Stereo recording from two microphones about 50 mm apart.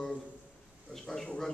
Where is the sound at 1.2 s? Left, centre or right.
Centre.